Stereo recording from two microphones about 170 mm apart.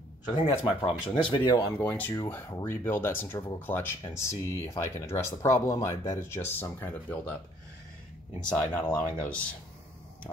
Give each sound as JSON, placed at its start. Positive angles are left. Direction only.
{"t": 0.7, "sound": "speech", "side_deg": 30}
{"t": 1.6, "sound": "speech", "side_deg": 10}
{"t": 8.5, "sound": "speech", "side_deg": 10}